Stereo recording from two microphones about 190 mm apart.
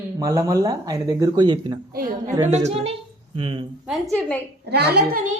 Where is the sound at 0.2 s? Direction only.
20° right (ahead or behind).